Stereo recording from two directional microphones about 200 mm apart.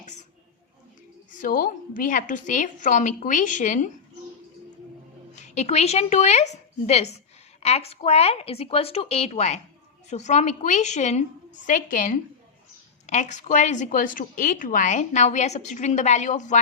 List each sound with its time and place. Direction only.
1.3 s a woman's voice: 40° left (ahead or behind)
5.3 s a woman's voice: 35° left (ahead or behind)